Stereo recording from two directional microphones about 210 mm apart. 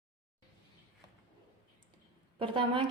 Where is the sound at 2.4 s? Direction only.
25° right (ahead or behind).